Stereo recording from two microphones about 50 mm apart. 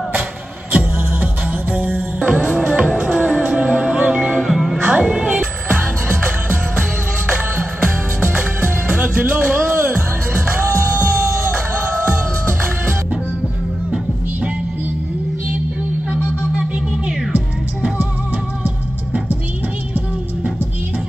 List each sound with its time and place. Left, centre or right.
0.7 s music: right
4.4 s music: centre
4.7 s music: centre
5.7 s music: right
16.1 s music: centre